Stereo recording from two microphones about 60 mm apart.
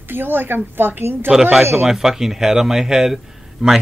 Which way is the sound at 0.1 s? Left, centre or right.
Right.